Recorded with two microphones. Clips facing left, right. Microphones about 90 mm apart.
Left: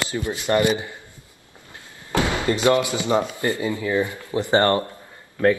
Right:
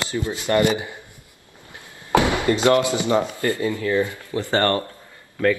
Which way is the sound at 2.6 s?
20° left (ahead or behind).